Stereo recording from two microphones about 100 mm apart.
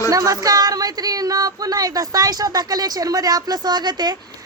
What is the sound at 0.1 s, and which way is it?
A woman's voice, 35° right (ahead or behind).